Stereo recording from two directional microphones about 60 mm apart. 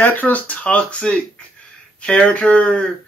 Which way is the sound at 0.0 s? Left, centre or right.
Left.